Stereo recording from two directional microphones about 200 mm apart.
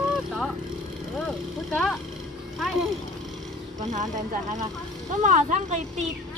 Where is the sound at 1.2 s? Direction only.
Centre (ahead or behind).